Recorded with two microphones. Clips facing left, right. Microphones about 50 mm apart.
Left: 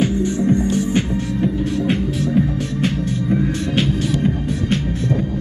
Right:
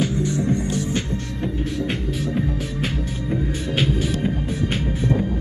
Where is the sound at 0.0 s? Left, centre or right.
Left.